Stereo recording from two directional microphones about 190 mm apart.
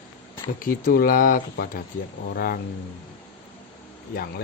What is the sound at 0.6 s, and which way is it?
Speech, 50° left (ahead or behind).